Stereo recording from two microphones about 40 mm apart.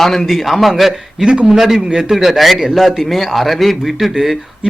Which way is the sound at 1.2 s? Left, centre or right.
Centre.